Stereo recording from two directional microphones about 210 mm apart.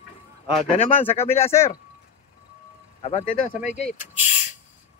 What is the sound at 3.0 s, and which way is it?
Speech, 30° left (ahead or behind).